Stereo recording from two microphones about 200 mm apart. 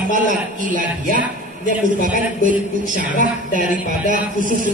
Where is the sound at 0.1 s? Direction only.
40° right (ahead or behind).